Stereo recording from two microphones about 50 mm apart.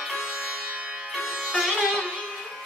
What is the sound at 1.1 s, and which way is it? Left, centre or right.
Music, centre.